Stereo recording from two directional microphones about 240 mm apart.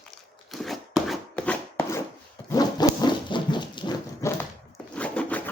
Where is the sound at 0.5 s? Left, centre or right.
Centre.